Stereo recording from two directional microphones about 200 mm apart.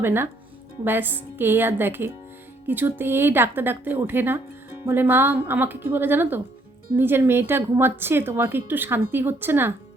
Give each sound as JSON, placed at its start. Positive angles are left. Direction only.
{"t": 0.0, "sound": "a woman's voice", "side_deg": -10}